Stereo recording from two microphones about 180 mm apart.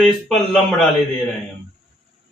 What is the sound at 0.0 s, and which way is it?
Speech, centre (ahead or behind).